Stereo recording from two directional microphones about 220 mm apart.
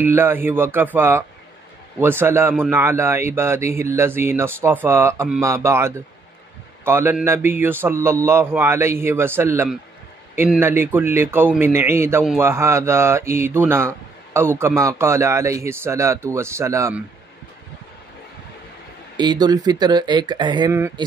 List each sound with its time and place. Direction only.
0.0 s speech: 10° right (ahead or behind)
19.1 s speech: 20° right (ahead or behind)